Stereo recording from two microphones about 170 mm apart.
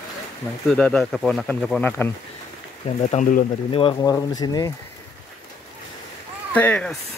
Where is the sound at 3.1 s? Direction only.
50° left (ahead or behind).